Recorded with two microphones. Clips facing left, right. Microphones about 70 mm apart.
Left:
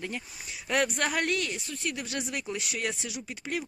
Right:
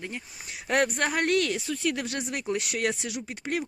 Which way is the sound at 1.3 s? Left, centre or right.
Right.